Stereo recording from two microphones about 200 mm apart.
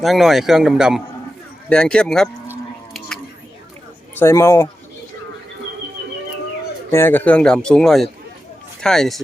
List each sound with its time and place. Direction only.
0.0 s speech: centre (ahead or behind)
4.2 s a man's voice: 15° left (ahead or behind)
6.9 s speech: 10° left (ahead or behind)